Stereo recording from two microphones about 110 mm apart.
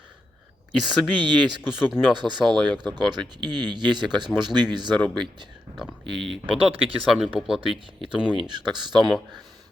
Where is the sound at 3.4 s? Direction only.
40° right (ahead or behind).